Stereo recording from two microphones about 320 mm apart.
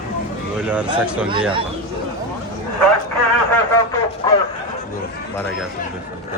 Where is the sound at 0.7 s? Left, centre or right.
Centre.